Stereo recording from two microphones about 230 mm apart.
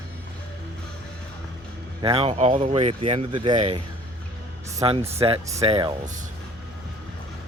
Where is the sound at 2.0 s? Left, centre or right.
Right.